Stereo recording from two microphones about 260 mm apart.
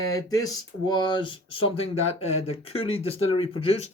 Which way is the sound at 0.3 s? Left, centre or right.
Centre.